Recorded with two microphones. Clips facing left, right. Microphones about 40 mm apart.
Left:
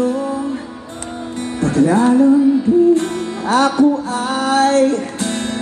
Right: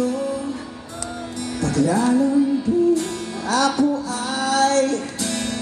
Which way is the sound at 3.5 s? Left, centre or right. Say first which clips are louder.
Left 5 dB; left.